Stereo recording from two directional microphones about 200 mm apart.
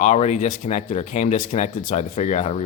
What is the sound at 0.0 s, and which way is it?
Speech, 35° left (ahead or behind).